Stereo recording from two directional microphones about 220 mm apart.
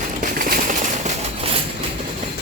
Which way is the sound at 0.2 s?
40° right (ahead or behind).